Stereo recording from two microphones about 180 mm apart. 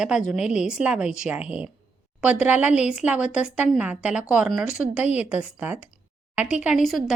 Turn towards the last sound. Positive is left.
turn(degrees=0)  # may be behind; listen again after turning